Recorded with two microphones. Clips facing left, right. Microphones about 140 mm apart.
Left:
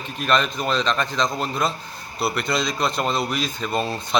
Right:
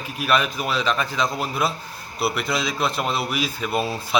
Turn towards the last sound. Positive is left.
turn(degrees=-5)  # may be behind; listen again after turning